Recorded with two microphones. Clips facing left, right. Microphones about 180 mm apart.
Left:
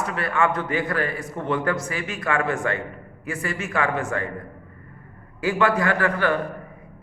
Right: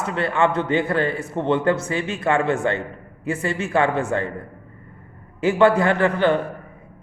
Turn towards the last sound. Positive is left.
turn(degrees=-25)  # may be behind; listen again after turning